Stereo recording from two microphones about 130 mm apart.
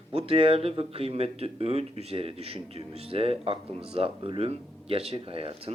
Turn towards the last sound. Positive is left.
turn(degrees=-45)  # may be behind; listen again after turning